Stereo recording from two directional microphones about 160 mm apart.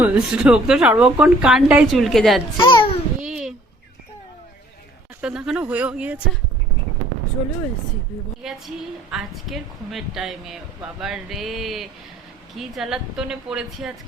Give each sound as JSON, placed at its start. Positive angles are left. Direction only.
{"t": 0.0, "sound": "a woman's voice", "side_deg": -5}
{"t": 2.6, "sound": "a child's voice", "side_deg": 30}
{"t": 3.2, "sound": "a sound", "side_deg": -5}
{"t": 5.2, "sound": "speech", "side_deg": -5}
{"t": 8.4, "sound": "a woman's voice", "side_deg": 0}